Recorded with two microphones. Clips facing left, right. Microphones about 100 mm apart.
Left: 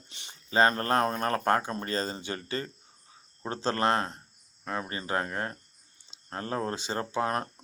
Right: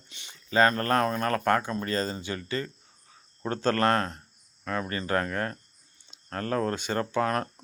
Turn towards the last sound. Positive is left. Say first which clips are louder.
# right 3 dB
turn(degrees=20)  # may be behind; listen again after turning